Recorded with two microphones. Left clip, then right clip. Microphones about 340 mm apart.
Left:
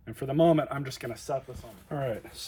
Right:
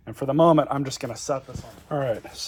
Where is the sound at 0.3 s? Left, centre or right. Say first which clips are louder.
Right 6 dB; centre.